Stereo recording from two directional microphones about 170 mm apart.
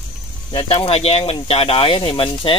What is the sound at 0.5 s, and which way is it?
Speech, 30° left (ahead or behind).